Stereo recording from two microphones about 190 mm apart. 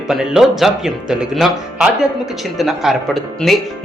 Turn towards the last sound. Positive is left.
turn(degrees=0)  # may be behind; listen again after turning